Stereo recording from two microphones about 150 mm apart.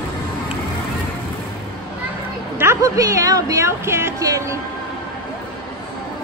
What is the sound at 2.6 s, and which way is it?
Speech, 20° right (ahead or behind).